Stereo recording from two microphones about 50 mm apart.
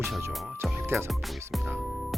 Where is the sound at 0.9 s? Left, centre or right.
Centre.